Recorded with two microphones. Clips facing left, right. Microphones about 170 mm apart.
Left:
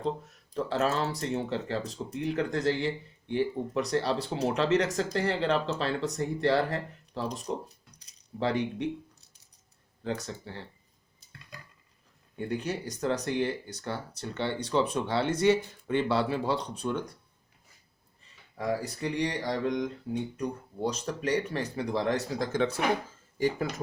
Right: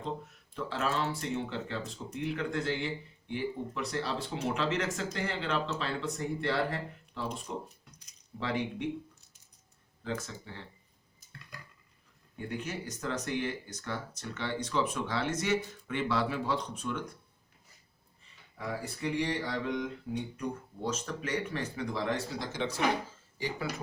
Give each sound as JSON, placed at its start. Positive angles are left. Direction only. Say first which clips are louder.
{"t": 0.5, "sound": "speech", "louder": "left 5 dB", "side_deg": 40}
{"t": 10.0, "sound": "speech", "louder": "left 3 dB", "side_deg": 35}
{"t": 12.5, "sound": "speech", "louder": "left 5 dB", "side_deg": 35}
{"t": 18.5, "sound": "speech", "louder": "left 7 dB", "side_deg": 35}